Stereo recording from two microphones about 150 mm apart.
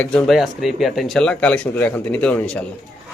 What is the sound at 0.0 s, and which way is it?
Speech, 5° left (ahead or behind).